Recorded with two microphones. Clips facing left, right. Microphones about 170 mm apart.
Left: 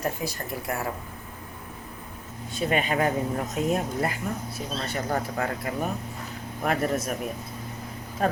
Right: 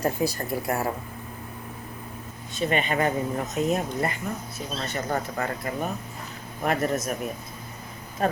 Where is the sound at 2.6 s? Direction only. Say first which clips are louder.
Even; 5° left (ahead or behind).